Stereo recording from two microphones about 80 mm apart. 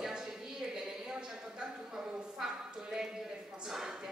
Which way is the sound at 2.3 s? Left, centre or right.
Centre.